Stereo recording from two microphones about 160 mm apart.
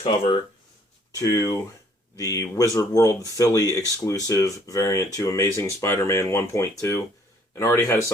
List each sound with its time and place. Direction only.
0.0 s speech: 40° left (ahead or behind)
1.1 s speech: 20° left (ahead or behind)